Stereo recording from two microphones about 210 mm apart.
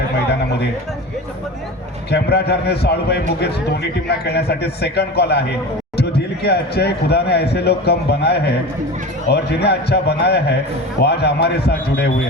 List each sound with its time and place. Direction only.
2.0 s speech: 50° left (ahead or behind)